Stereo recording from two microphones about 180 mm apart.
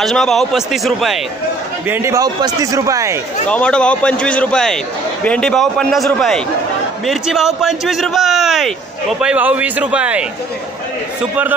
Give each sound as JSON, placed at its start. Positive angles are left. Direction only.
{"t": 0.0, "sound": "a man's voice", "side_deg": 0}
{"t": 1.9, "sound": "a man's voice", "side_deg": -15}
{"t": 3.4, "sound": "a man's voice", "side_deg": 5}